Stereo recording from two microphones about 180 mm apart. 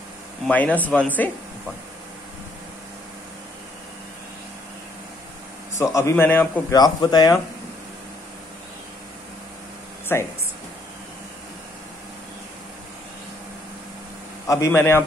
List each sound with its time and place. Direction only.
0.5 s a man's voice: 10° left (ahead or behind)
5.8 s a man's voice: 15° left (ahead or behind)
6.7 s speech: 20° left (ahead or behind)
10.1 s a man's voice: 15° left (ahead or behind)
14.5 s a man's voice: 15° left (ahead or behind)